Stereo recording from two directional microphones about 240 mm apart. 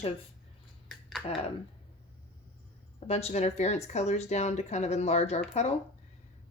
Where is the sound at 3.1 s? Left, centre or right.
Left.